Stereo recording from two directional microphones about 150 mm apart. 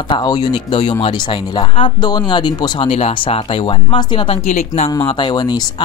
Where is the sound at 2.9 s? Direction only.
40° left (ahead or behind).